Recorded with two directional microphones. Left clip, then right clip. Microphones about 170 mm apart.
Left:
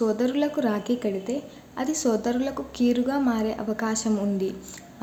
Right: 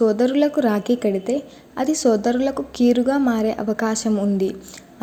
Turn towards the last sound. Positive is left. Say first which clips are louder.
# right 5 dB
turn(degrees=-30)  # may be behind; listen again after turning